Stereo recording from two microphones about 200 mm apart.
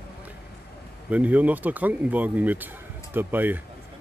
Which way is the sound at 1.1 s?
5° right (ahead or behind).